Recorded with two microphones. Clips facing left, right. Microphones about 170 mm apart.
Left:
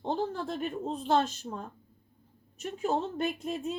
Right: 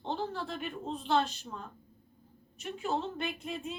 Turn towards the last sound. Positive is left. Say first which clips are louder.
# left 5 dB
turn(degrees=45)  # may be behind; listen again after turning